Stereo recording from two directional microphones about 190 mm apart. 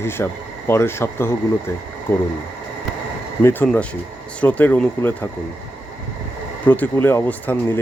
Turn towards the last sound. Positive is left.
turn(degrees=10)  # may be behind; listen again after turning